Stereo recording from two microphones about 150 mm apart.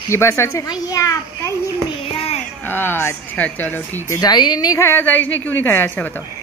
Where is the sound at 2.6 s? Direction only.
15° left (ahead or behind).